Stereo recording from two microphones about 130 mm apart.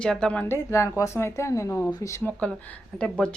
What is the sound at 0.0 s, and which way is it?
Speech, 5° left (ahead or behind).